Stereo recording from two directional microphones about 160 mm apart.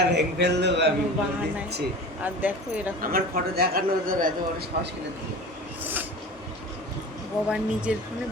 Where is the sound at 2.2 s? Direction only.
10° right (ahead or behind).